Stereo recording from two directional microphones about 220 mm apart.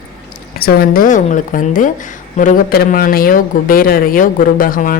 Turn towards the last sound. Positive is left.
turn(degrees=40)  # may be behind; listen again after turning